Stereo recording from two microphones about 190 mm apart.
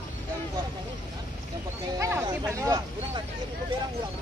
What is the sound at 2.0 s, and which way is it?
Speech, 15° right (ahead or behind).